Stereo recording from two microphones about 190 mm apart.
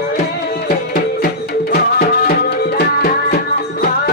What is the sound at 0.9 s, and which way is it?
Music, 50° left (ahead or behind).